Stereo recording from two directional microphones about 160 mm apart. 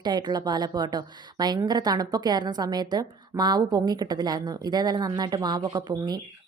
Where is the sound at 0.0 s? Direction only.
25° right (ahead or behind).